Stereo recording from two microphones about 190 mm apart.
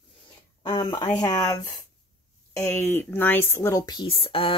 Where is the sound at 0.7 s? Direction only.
20° left (ahead or behind).